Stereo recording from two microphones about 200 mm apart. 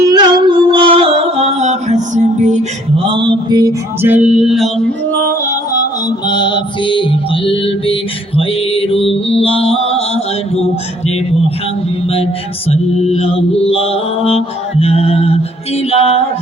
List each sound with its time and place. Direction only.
0.0 s music: 20° right (ahead or behind); by 2.6 s 35° right (ahead or behind)
3.0 s mantra: 25° right (ahead or behind); by 4.7 s centre (ahead or behind)
6.1 s mantra: 20° left (ahead or behind)
12.7 s mantra: 30° left (ahead or behind)